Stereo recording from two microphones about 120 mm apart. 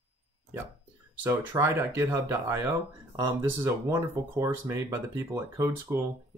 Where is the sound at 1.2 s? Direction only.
20° right (ahead or behind).